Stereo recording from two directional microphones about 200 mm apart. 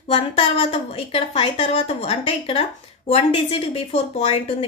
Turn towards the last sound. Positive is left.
turn(degrees=30)  # may be behind; listen again after turning